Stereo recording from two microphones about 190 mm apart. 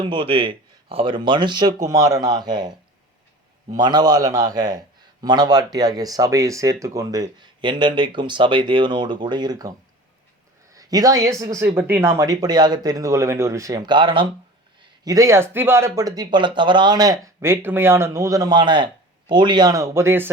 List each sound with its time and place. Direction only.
0.0 s speech: 25° right (ahead or behind)